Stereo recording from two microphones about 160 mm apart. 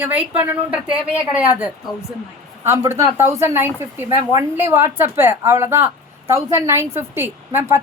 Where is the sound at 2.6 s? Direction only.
15° right (ahead or behind).